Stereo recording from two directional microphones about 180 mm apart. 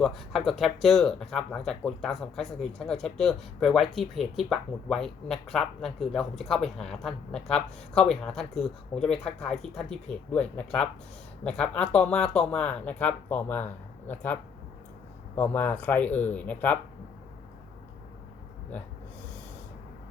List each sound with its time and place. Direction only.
0.0 s speech: centre (ahead or behind)
15.4 s speech: 10° left (ahead or behind)